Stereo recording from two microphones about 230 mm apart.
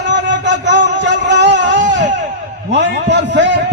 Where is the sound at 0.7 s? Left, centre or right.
Right.